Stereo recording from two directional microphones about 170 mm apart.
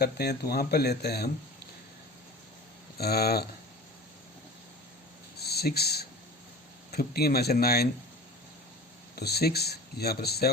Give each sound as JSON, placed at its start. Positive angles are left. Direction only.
{"t": 0.0, "sound": "speech", "side_deg": 70}
{"t": 3.0, "sound": "speech", "side_deg": 65}
{"t": 5.4, "sound": "speech", "side_deg": 70}
{"t": 9.1, "sound": "speech", "side_deg": 70}